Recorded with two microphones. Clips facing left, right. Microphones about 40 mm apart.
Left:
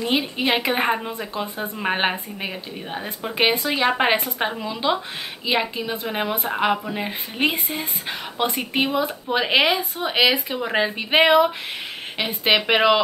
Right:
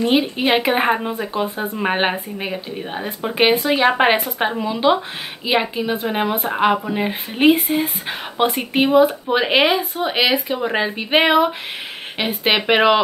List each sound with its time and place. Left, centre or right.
0.0 s a woman's voice: centre